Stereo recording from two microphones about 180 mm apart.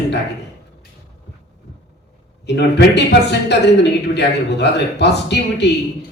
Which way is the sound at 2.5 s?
70° left (ahead or behind).